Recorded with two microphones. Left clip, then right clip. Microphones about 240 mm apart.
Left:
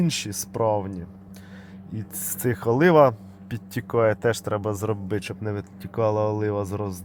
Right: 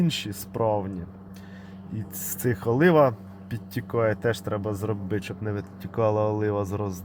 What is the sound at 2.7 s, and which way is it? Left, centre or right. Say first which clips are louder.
A man's voice: left 3 dB; centre.